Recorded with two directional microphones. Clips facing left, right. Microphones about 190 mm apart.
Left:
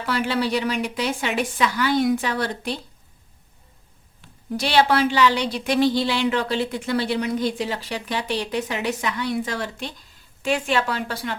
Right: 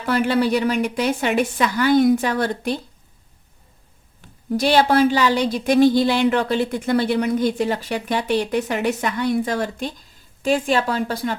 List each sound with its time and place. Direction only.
0.0 s speech: 50° right (ahead or behind)
4.6 s speech: 45° right (ahead or behind)